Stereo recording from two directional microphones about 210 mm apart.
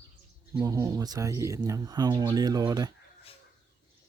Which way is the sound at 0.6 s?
15° right (ahead or behind).